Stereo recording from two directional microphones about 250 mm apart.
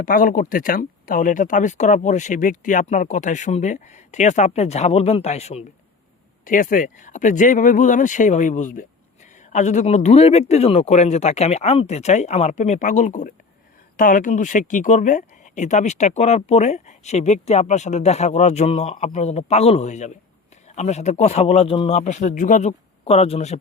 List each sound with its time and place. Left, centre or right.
0.0 s speech: left